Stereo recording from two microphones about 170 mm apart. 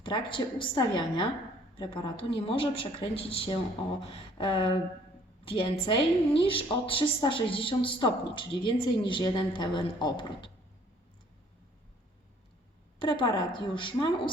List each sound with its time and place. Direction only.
0.0 s a woman's voice: 30° left (ahead or behind)
13.0 s a woman's voice: 30° left (ahead or behind)